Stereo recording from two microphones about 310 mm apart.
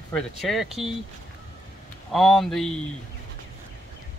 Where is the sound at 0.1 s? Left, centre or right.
Centre.